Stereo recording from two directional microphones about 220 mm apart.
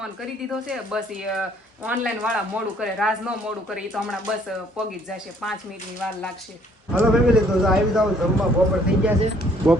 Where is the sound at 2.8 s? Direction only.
Centre (ahead or behind).